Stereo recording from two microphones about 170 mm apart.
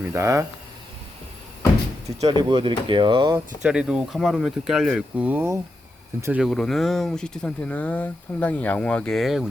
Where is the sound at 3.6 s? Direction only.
5° right (ahead or behind).